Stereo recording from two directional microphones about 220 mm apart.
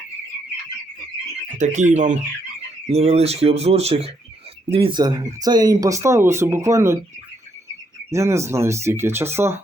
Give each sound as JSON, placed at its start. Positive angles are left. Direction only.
{"t": 1.5, "sound": "speech", "side_deg": -35}
{"t": 8.1, "sound": "speech", "side_deg": -15}